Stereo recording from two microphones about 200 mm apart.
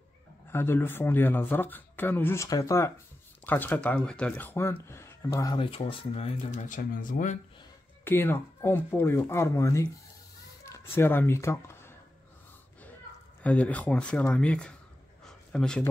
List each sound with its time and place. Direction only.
0.5 s speech: 10° left (ahead or behind); by 7.3 s 40° left (ahead or behind)
8.0 s speech: 10° left (ahead or behind)
13.4 s speech: 5° left (ahead or behind)